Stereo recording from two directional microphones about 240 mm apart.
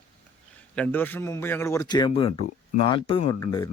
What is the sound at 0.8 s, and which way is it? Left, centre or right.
A man's voice, centre.